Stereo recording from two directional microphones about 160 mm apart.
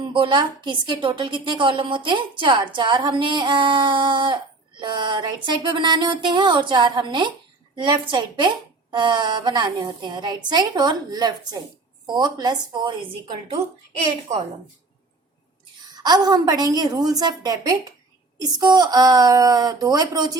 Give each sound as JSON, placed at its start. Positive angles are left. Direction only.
{"t": 0.0, "sound": "a woman's voice", "side_deg": -30}
{"t": 15.8, "sound": "a woman's voice", "side_deg": -25}